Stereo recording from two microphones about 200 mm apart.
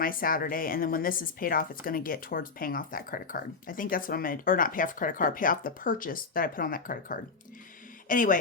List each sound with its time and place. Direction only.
0.0 s speech: 45° left (ahead or behind)